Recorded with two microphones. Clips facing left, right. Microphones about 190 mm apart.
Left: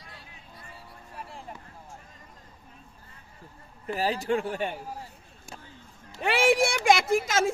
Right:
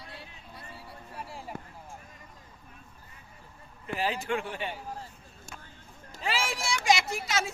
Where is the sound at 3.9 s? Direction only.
35° left (ahead or behind).